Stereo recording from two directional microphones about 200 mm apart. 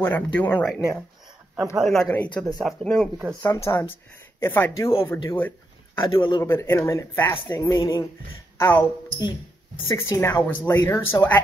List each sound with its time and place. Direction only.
0.0 s speech: 10° left (ahead or behind)
1.6 s speech: 5° right (ahead or behind); by 4.9 s 10° left (ahead or behind)
5.9 s speech: 25° left (ahead or behind)
6.4 s speech: 10° left (ahead or behind)